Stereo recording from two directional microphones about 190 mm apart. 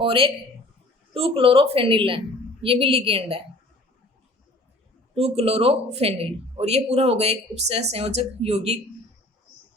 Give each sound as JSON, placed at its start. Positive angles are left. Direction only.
{"t": 0.0, "sound": "a woman's voice", "side_deg": -30}
{"t": 5.1, "sound": "a man's voice", "side_deg": -30}